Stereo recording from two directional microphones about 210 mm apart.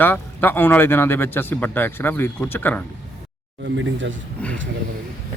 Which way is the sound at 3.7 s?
65° right (ahead or behind).